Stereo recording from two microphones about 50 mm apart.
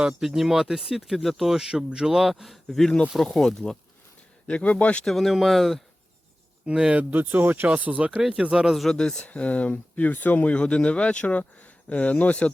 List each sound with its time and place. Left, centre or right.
0.1 s speech: centre
2.0 s speech: centre
2.6 s speech: centre
4.4 s speech: left
5.0 s speech: centre
6.7 s speech: centre
7.1 s speech: right
7.7 s speech: right
8.2 s speech: centre
8.7 s speech: centre
9.0 s speech: centre
9.2 s speech: left